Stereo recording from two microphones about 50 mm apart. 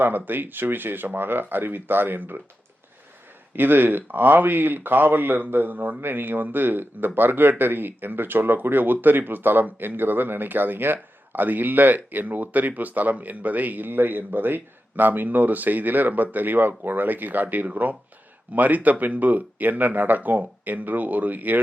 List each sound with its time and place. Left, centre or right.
0.0 s speech: right
3.5 s speech: right